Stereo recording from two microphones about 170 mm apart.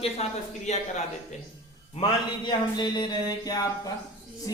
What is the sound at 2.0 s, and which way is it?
Mantra, 40° left (ahead or behind).